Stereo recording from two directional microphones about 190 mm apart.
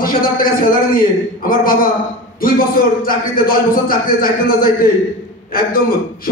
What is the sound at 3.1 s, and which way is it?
A man's voice, 50° left (ahead or behind).